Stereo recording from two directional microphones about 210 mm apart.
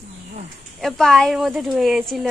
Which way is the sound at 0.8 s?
Centre (ahead or behind).